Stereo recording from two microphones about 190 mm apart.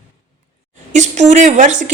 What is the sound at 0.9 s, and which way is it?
Speech, 40° right (ahead or behind).